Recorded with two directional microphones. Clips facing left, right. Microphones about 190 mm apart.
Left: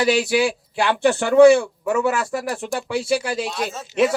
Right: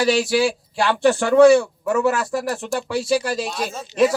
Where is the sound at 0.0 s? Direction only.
20° left (ahead or behind).